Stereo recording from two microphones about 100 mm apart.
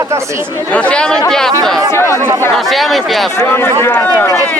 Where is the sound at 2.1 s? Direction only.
30° right (ahead or behind).